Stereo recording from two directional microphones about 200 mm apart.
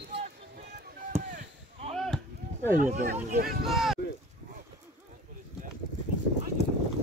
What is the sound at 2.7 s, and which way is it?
Speech, 40° right (ahead or behind).